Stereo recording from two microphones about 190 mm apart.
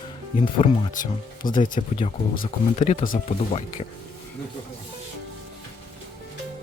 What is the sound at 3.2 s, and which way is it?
Speech, 30° left (ahead or behind).